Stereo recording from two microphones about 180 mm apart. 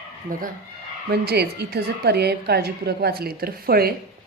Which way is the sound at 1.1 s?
65° right (ahead or behind).